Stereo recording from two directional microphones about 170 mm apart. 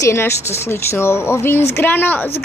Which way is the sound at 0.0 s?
15° left (ahead or behind).